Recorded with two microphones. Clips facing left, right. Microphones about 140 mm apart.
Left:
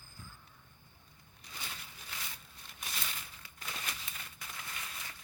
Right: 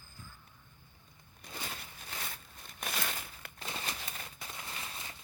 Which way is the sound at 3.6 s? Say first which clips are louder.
Right 3 dB; 30° right (ahead or behind).